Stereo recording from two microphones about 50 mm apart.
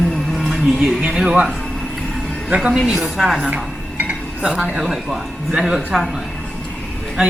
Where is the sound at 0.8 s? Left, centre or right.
Centre.